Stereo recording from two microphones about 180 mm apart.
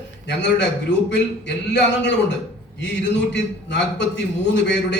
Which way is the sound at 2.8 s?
80° left.